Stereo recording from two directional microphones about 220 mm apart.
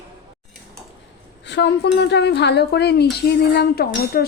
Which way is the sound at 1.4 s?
50° left (ahead or behind).